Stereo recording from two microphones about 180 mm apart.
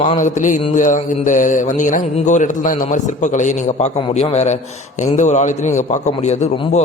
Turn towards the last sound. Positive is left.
turn(degrees=40)  # may be behind; listen again after turning